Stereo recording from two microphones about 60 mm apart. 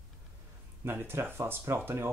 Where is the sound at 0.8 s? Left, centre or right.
Right.